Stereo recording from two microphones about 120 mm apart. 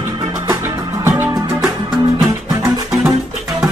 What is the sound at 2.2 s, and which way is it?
Music, 25° right (ahead or behind).